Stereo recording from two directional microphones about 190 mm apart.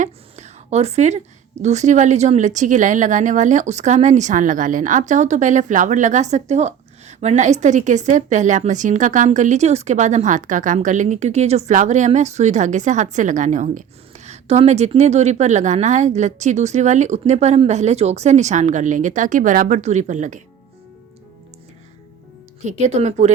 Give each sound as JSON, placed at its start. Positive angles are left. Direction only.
{"t": 0.0, "sound": "a sound", "side_deg": -35}
{"t": 1.6, "sound": "speech", "side_deg": -35}
{"t": 22.6, "sound": "speech", "side_deg": -35}